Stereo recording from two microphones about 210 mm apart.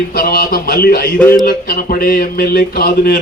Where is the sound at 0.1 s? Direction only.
45° left (ahead or behind).